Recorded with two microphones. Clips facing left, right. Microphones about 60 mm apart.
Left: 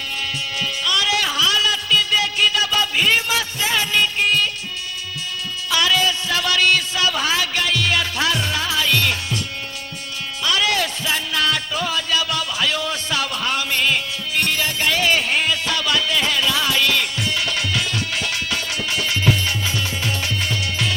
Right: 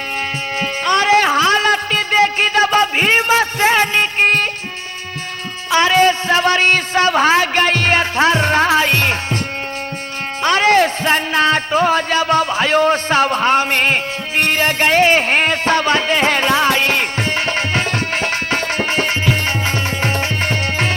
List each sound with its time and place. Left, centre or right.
0.6 s music: right
5.7 s a sound: right
10.4 s music: right